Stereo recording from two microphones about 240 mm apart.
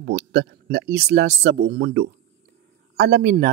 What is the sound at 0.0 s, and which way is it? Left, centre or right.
Speech, right.